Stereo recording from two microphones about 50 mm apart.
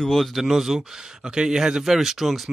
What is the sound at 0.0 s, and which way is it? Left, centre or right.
Speech, centre.